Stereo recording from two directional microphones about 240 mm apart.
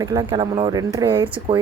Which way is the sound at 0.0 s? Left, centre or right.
Centre.